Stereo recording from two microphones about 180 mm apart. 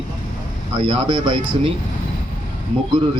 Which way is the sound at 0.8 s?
30° right (ahead or behind).